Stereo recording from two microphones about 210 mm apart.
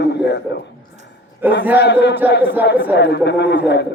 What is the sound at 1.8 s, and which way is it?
A man's voice, 55° left (ahead or behind).